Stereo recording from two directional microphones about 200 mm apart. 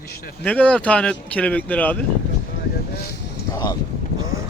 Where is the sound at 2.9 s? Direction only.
55° left (ahead or behind).